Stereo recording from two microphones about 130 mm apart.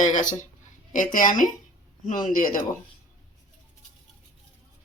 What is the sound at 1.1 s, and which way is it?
Speech, 85° left.